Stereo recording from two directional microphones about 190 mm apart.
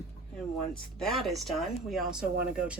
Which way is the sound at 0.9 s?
Centre (ahead or behind).